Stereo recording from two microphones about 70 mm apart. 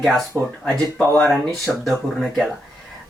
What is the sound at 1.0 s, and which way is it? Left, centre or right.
Speech, left.